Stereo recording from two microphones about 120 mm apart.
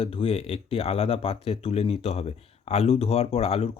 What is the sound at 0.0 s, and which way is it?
Speech, 50° left (ahead or behind).